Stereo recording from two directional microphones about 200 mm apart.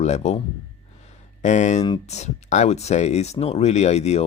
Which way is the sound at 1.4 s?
35° left (ahead or behind).